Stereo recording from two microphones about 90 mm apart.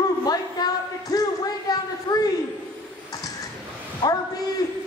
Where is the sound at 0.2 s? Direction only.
45° left (ahead or behind).